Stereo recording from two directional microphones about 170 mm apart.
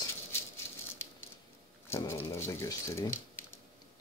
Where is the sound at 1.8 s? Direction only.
15° left (ahead or behind).